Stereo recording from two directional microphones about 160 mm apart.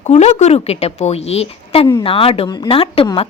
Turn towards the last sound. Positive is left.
turn(degrees=35)  # may be behind; listen again after turning